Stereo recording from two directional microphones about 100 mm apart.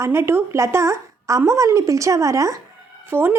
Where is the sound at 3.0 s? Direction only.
20° right (ahead or behind).